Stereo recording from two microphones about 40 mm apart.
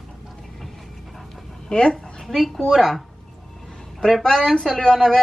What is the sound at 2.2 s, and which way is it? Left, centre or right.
Speech, centre.